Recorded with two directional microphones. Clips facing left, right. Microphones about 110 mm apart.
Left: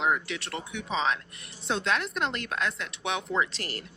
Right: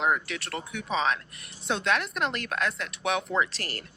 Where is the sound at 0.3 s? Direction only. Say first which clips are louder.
Even; 25° left (ahead or behind).